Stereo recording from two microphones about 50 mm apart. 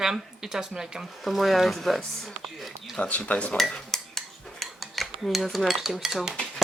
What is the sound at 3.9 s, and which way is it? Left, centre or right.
Cutlery, centre.